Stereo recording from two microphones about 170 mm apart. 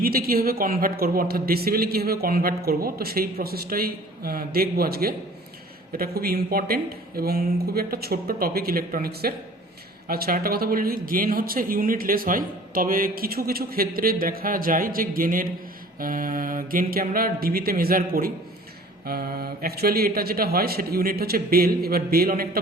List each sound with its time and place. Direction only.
0.0 s speech: 60° right (ahead or behind)